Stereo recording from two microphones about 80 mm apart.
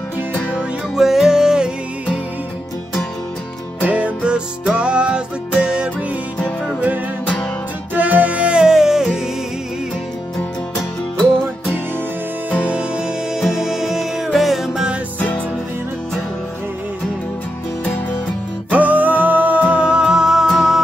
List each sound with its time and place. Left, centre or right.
0.5 s music: centre
3.8 s music: centre
6.3 s music: centre
7.9 s music: centre
12.6 s music: centre
15.1 s music: centre
18.7 s music: centre